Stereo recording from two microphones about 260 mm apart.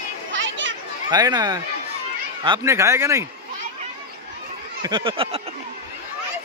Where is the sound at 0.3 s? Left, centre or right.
Right.